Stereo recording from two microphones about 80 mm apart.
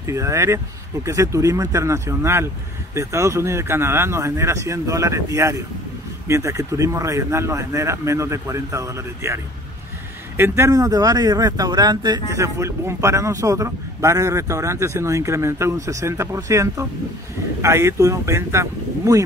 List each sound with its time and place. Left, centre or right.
0.0 s speech: right
10.7 s speech: right
12.4 s speech: right